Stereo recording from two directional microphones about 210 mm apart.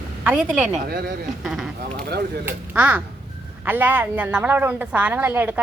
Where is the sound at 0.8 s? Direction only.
45° right (ahead or behind).